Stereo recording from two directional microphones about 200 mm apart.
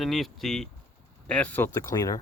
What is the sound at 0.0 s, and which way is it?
Speech, centre (ahead or behind).